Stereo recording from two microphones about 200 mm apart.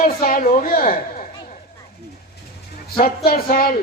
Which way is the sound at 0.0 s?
40° left (ahead or behind).